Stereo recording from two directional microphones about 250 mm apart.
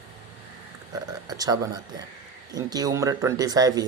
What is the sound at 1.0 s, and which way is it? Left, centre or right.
Speech, centre.